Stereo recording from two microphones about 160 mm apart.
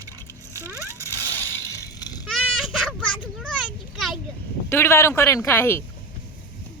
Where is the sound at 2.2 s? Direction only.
Centre (ahead or behind).